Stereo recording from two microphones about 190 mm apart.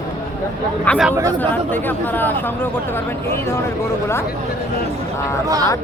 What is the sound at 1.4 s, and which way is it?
Speech, 10° left (ahead or behind).